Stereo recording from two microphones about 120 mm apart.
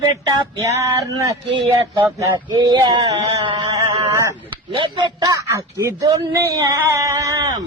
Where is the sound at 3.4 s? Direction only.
40° right (ahead or behind).